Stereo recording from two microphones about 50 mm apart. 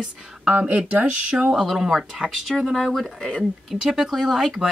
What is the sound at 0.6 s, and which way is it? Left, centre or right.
Speech, right.